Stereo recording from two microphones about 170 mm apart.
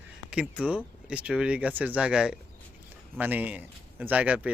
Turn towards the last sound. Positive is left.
turn(degrees=-10)  # may be behind; listen again after turning